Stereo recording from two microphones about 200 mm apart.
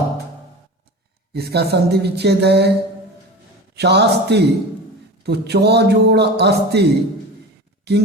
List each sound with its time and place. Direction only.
1.3 s a man's voice: 55° right (ahead or behind)
3.8 s a man's voice: 55° right (ahead or behind)